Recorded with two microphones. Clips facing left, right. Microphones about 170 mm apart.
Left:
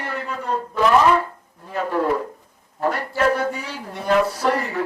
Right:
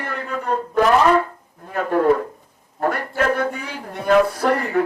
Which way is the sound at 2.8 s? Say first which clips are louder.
Even; 55° right (ahead or behind).